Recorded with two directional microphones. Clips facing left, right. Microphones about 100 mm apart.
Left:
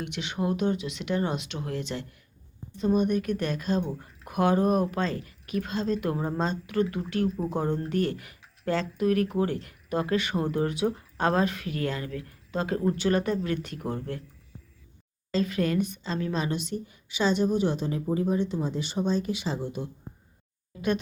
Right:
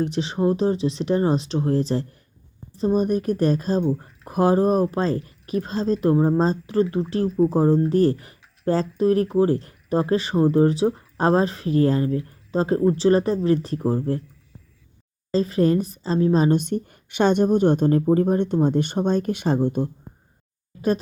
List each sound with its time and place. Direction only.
0.0 s speech: 35° right (ahead or behind)
7.3 s speech: centre (ahead or behind)
7.5 s speech: 35° right (ahead or behind)
15.3 s speech: 35° right (ahead or behind)